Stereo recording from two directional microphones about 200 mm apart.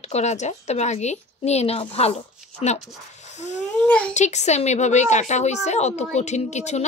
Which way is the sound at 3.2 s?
35° left (ahead or behind).